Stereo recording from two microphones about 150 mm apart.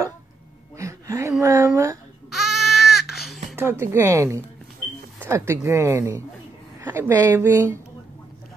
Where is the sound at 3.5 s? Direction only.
15° right (ahead or behind).